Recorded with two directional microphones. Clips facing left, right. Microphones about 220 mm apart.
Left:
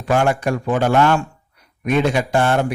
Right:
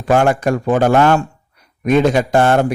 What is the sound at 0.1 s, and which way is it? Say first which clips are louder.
A man's voice: right 4 dB; 45° right (ahead or behind).